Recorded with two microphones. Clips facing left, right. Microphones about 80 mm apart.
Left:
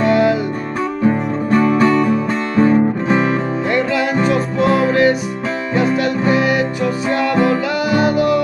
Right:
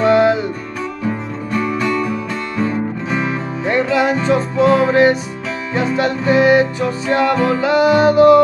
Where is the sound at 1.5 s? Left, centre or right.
Left.